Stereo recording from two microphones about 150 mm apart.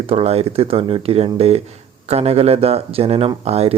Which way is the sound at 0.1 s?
40° right (ahead or behind).